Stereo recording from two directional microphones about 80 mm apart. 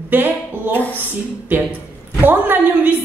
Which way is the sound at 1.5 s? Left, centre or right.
Right.